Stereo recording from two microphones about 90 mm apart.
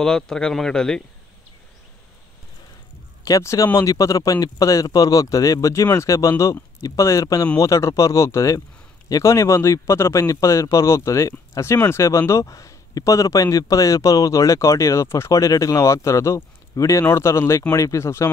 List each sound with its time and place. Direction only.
0.0 s speech: 5° left (ahead or behind)
3.3 s speech: 35° left (ahead or behind)